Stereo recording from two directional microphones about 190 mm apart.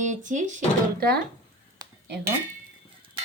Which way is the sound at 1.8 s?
20° right (ahead or behind).